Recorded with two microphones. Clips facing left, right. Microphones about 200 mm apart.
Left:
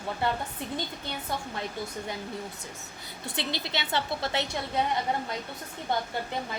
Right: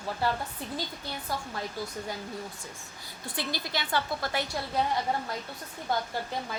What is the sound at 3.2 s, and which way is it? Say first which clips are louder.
A woman's voice: left 1 dB; 25° left (ahead or behind).